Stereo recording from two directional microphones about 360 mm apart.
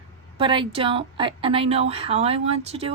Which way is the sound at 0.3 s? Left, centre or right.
Centre.